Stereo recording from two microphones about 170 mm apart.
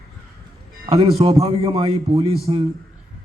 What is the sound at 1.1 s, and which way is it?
A man's voice, 35° right (ahead or behind).